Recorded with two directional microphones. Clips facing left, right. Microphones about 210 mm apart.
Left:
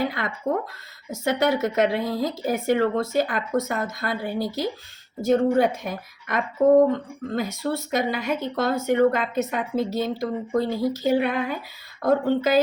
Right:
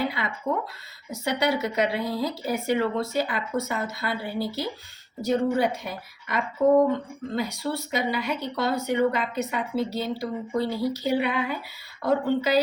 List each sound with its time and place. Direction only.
0.0 s speech: 45° left (ahead or behind)